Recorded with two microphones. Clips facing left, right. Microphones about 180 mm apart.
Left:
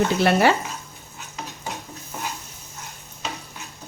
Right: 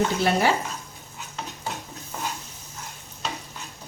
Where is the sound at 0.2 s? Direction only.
70° left (ahead or behind).